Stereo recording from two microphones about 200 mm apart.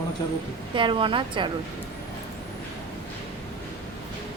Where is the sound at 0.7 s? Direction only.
25° right (ahead or behind).